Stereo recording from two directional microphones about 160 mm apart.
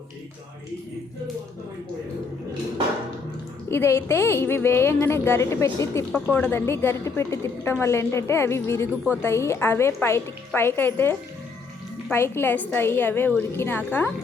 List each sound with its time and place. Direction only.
3.7 s a woman's voice: 15° left (ahead or behind)